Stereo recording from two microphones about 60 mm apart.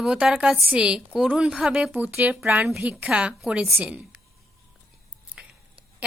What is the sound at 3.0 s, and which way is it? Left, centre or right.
Speech, centre.